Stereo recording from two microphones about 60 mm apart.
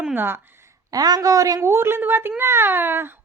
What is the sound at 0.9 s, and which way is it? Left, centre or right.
Speech, right.